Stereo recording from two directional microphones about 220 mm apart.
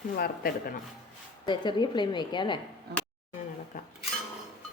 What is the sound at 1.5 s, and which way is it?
A woman's voice, 20° left (ahead or behind).